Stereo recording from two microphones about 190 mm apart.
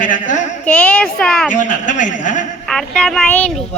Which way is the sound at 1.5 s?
40° left (ahead or behind).